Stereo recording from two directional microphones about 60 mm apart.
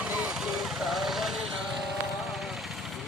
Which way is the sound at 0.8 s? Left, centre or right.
Centre.